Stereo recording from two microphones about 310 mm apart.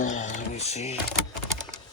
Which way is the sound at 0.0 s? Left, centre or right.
Left.